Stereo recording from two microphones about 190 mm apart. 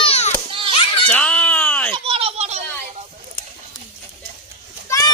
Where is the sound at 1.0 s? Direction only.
5° left (ahead or behind).